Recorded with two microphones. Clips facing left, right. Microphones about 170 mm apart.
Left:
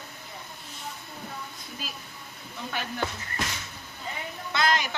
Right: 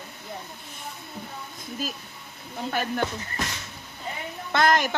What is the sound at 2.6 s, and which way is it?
Speech, 45° right (ahead or behind).